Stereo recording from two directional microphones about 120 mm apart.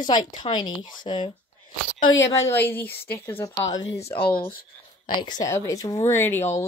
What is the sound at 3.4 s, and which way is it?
Speech, 35° left (ahead or behind).